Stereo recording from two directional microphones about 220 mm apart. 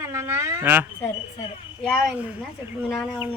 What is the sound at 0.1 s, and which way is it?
Speech, 10° right (ahead or behind).